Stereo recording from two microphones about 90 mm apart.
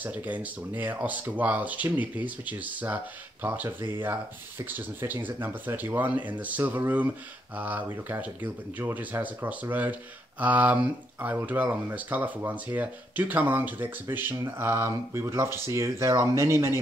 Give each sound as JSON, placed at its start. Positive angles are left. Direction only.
{"t": 0.0, "sound": "speech", "side_deg": -20}